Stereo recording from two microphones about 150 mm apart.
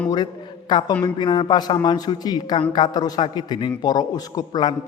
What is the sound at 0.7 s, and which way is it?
A man's voice, 30° left (ahead or behind).